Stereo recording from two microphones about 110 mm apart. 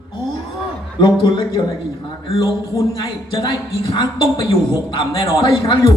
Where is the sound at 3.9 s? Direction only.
45° left (ahead or behind).